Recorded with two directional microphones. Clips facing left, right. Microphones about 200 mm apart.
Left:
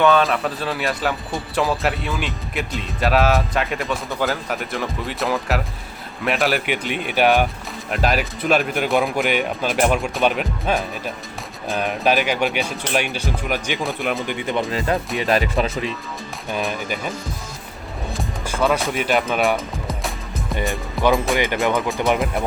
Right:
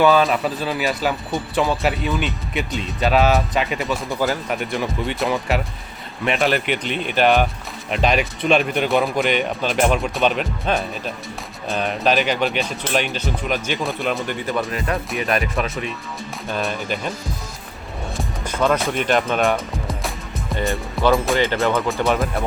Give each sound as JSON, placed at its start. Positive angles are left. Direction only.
{"t": 0.0, "sound": "speech", "side_deg": 0}
{"t": 16.6, "sound": "speech", "side_deg": 5}
{"t": 18.2, "sound": "speech", "side_deg": 5}
{"t": 19.9, "sound": "music", "side_deg": 0}
{"t": 21.1, "sound": "speech", "side_deg": 0}
{"t": 21.3, "sound": "speech", "side_deg": 15}